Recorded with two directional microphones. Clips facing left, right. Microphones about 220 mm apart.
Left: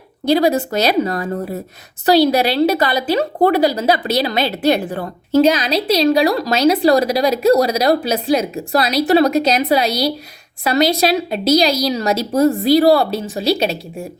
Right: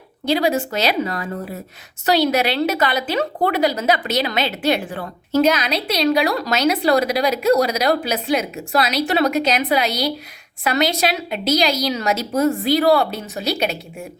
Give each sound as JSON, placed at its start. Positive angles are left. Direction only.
{"t": 0.3, "sound": "a woman's voice", "side_deg": 40}